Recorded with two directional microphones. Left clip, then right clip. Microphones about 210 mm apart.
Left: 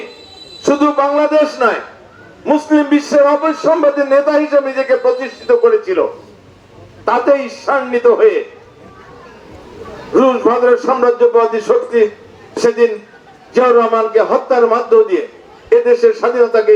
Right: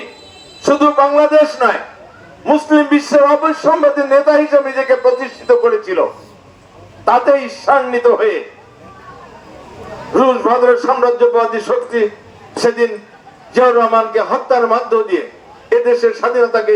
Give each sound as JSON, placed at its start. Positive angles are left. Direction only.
{"t": 0.6, "sound": "a man's voice", "side_deg": -40}
{"t": 10.1, "sound": "a man's voice", "side_deg": -40}